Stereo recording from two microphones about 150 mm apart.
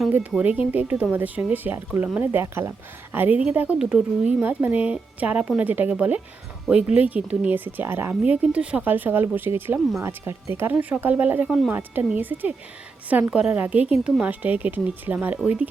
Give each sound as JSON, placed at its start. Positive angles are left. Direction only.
{"t": 0.1, "sound": "speech", "side_deg": -10}